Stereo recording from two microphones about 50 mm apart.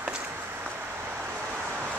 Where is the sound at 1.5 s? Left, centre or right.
Right.